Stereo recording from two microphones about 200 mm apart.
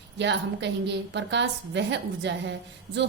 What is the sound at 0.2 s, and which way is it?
A woman's voice, 60° right (ahead or behind).